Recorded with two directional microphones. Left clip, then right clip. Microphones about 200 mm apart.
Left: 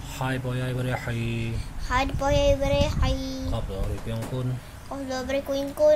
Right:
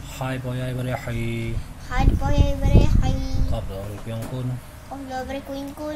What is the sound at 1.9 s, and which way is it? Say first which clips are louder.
Speech: left 2 dB; 50° left (ahead or behind).